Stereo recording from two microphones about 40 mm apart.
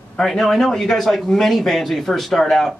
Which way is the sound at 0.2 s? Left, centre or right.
Centre.